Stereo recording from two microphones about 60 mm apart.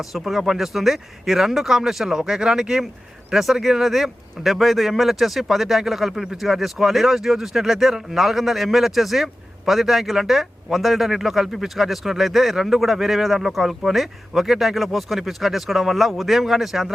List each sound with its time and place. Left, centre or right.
0.0 s speech: centre